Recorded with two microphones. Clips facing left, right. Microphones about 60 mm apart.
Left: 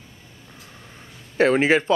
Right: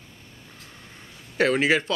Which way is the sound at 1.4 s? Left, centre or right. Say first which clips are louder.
Left 3 dB; left.